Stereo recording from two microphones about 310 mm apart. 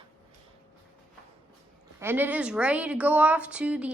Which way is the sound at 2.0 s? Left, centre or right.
Centre.